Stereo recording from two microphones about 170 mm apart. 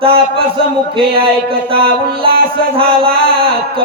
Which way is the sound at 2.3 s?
60° right (ahead or behind).